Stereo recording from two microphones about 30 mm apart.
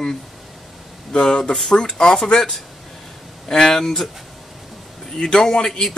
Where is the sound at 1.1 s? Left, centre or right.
Left.